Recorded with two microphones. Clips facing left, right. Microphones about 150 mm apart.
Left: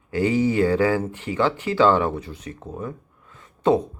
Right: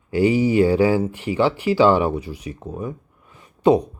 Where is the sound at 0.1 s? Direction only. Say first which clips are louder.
Right 3 dB; 15° right (ahead or behind).